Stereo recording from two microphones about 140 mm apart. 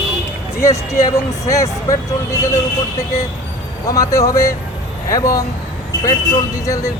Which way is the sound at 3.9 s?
25° left (ahead or behind).